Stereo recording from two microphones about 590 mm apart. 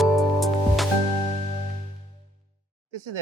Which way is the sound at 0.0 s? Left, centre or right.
Centre.